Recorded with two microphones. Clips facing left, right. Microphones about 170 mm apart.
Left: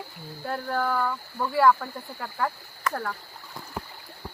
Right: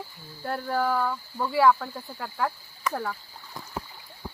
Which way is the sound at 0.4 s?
5° right (ahead or behind).